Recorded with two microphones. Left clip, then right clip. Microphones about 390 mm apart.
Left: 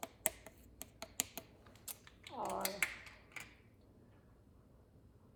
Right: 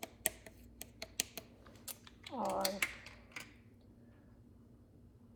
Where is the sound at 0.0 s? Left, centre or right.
Centre.